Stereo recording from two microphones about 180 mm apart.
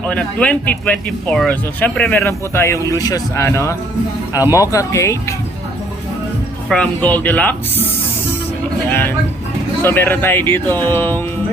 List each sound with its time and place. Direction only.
0.0 s speech: 5° left (ahead or behind)
6.7 s speech: 5° left (ahead or behind)
8.9 s speech: 10° left (ahead or behind)